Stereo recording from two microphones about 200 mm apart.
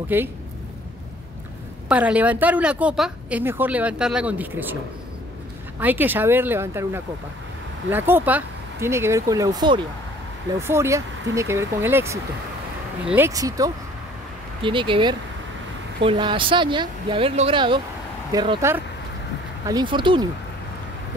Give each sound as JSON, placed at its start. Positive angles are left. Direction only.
{"t": 0.1, "sound": "a woman's voice", "side_deg": -10}
{"t": 1.9, "sound": "a woman's voice", "side_deg": -5}
{"t": 5.8, "sound": "a woman's voice", "side_deg": -10}